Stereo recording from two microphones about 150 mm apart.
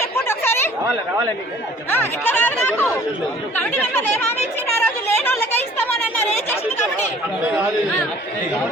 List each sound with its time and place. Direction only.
0.3 s chatter: 15° left (ahead or behind)
1.9 s speech: 15° left (ahead or behind)